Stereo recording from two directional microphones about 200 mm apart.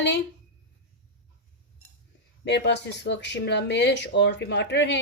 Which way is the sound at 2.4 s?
60° left (ahead or behind).